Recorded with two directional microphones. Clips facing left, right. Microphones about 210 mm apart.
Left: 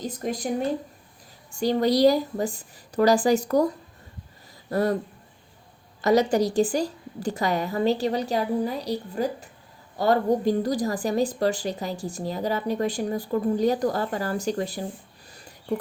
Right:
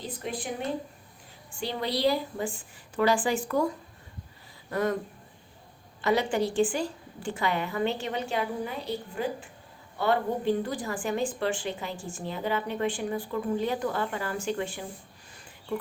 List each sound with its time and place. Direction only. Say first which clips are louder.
0.0 s a sound: left 6 dB; 40° left (ahead or behind)
1.5 s a woman's voice: left 10 dB; 40° left (ahead or behind)
4.7 s a woman's voice: left 4 dB; 35° left (ahead or behind)
6.0 s a woman's voice: left 6 dB; 40° left (ahead or behind)